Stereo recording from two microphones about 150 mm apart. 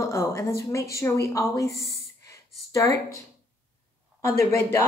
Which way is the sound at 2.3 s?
20° left (ahead or behind).